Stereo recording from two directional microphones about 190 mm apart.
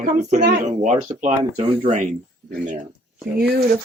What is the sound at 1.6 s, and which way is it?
Speech, 25° right (ahead or behind).